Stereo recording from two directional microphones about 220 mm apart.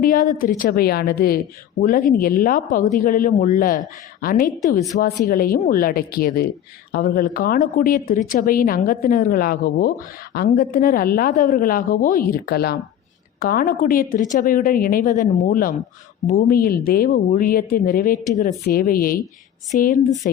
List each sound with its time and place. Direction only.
0.0 s a woman's voice: 40° left (ahead or behind)